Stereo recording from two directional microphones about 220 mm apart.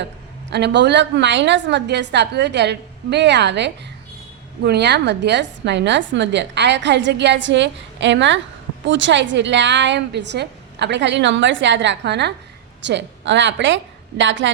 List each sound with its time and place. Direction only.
0.5 s a woman's voice: 50° right (ahead or behind)